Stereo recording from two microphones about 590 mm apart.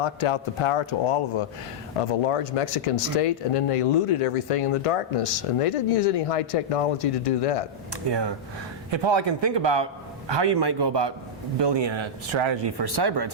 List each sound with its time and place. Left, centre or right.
0.0 s speech: left
8.9 s speech: right